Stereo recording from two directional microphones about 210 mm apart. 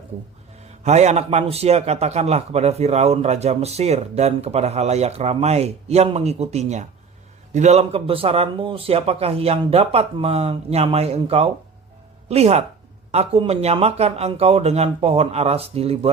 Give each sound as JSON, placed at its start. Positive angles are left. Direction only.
{"t": 0.9, "sound": "a man's voice", "side_deg": -30}